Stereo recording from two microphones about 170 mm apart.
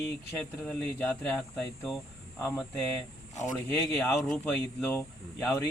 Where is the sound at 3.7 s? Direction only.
10° left (ahead or behind).